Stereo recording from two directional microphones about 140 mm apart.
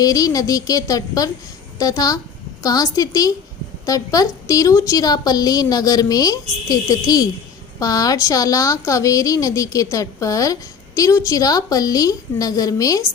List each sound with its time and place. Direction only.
0.0 s speech: 25° left (ahead or behind)